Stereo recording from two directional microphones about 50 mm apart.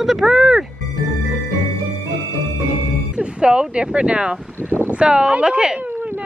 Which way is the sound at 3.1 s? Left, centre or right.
Right.